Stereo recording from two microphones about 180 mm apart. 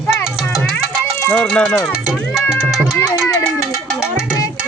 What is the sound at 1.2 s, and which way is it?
Speech, 10° left (ahead or behind).